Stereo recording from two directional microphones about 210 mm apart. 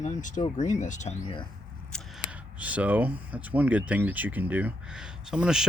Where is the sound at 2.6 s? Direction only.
5° right (ahead or behind).